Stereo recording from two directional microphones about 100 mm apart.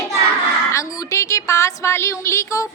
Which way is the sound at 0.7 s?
30° left (ahead or behind).